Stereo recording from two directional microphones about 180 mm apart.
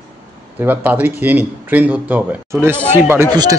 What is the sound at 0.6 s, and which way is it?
Speech, 10° right (ahead or behind).